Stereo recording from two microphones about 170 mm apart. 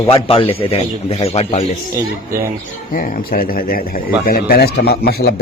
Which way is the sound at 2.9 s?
55° left (ahead or behind).